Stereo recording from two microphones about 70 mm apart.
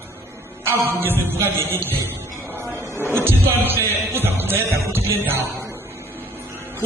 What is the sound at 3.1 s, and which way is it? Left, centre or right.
Music, right.